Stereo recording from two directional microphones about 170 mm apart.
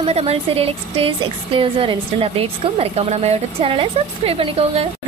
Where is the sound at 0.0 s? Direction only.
35° right (ahead or behind).